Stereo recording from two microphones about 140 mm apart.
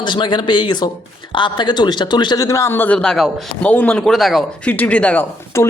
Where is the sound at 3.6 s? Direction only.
10° left (ahead or behind).